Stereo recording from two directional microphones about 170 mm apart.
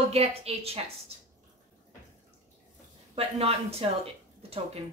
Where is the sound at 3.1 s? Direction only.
35° right (ahead or behind).